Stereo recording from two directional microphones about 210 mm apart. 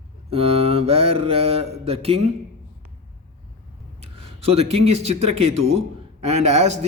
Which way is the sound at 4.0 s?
30° right (ahead or behind).